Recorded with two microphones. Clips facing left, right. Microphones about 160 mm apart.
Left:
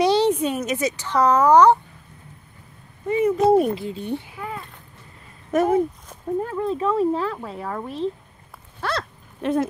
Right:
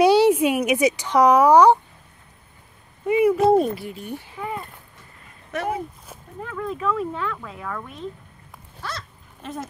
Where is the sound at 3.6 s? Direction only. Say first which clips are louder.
Left 3 dB; 20° left (ahead or behind).